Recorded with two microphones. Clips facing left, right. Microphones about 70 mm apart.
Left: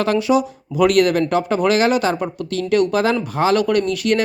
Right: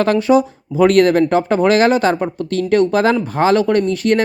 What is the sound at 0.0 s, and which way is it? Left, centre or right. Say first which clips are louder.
Speech: right 4 dB; right.